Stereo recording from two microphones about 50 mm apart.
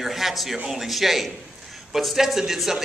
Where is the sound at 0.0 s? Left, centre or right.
Centre.